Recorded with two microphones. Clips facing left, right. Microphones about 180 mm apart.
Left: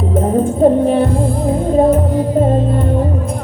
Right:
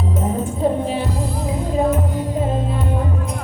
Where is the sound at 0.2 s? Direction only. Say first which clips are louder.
Left 9 dB; 55° left (ahead or behind).